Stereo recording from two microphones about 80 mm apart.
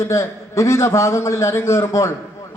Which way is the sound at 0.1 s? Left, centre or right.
Left.